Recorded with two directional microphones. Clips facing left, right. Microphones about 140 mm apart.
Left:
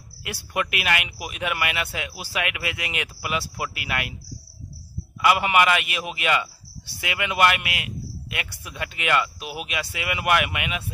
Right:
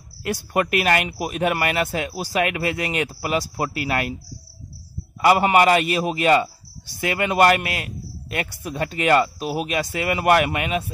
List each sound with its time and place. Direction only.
0.2 s a man's voice: 40° right (ahead or behind)
5.2 s a man's voice: 40° right (ahead or behind)